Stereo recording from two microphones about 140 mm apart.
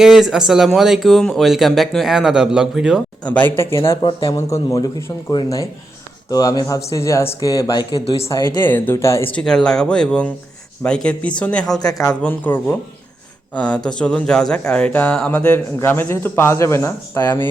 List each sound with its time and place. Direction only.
0.0 s speech: 5° right (ahead or behind)
3.2 s a man's voice: 10° left (ahead or behind)
4.0 s speech: 40° left (ahead or behind)
4.4 s speech: 20° left (ahead or behind)
8.6 s a man's voice: 15° left (ahead or behind)
9.3 s a man's voice: 5° left (ahead or behind)
11.8 s speech: 25° left (ahead or behind)
12.2 s a man's voice: 15° left (ahead or behind)